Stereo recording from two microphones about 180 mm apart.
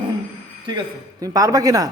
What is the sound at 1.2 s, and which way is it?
Speech, 20° right (ahead or behind).